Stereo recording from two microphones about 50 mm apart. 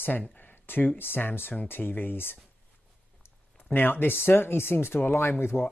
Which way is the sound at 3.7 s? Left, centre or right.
Left.